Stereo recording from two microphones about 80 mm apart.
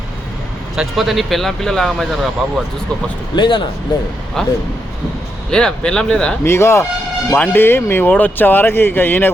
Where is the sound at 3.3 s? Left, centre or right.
Left.